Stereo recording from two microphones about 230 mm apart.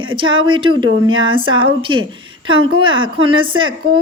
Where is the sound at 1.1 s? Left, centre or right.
Right.